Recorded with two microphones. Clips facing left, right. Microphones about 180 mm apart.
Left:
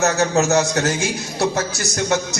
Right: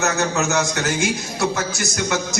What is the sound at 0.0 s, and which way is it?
A man's voice, 35° left (ahead or behind).